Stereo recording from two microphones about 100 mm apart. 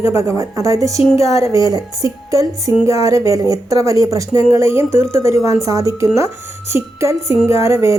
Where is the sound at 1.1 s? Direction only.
90° left.